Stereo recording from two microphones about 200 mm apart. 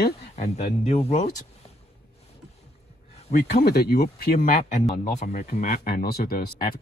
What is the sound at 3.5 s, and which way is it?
Speech, 50° left (ahead or behind).